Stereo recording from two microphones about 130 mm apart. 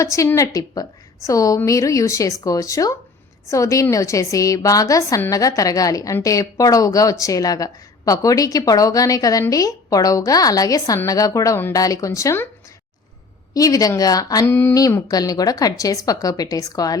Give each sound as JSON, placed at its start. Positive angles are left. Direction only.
{"t": 0.0, "sound": "speech", "side_deg": 25}
{"t": 13.5, "sound": "speech", "side_deg": 25}